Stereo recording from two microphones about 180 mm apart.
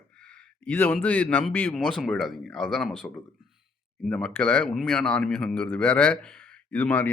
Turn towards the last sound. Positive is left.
turn(degrees=10)  # may be behind; listen again after turning